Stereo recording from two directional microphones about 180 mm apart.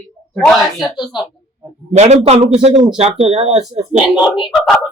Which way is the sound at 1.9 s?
40° right (ahead or behind).